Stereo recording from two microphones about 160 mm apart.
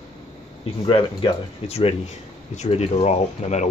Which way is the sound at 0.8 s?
35° left (ahead or behind).